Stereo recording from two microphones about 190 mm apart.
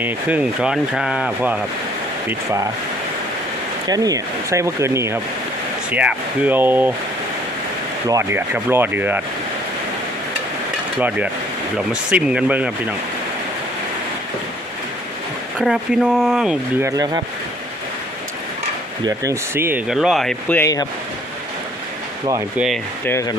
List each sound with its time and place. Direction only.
0.0 s speech: 10° right (ahead or behind)
3.8 s speech: 20° right (ahead or behind)
8.0 s speech: 15° right (ahead or behind)
11.9 s speech: 5° right (ahead or behind)
15.5 s speech: 5° right (ahead or behind)
16.8 s speech: 20° right (ahead or behind)
19.0 s speech: 15° right (ahead or behind); by 20.8 s 15° left (ahead or behind)
23.0 s speech: 15° left (ahead or behind)